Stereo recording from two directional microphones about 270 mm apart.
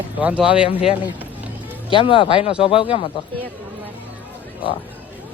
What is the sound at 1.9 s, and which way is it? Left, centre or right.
Speech, centre.